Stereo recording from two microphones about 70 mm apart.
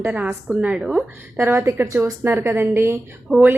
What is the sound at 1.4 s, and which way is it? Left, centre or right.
A woman's voice, right.